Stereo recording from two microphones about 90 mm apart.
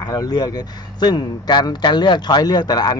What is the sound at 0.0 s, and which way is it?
Speech, 45° left (ahead or behind).